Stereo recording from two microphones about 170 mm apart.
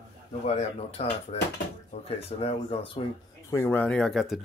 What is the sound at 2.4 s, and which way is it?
Speech, 35° left (ahead or behind).